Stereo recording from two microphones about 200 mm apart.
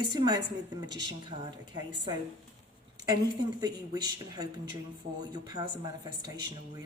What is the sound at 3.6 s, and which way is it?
Speech, 20° right (ahead or behind).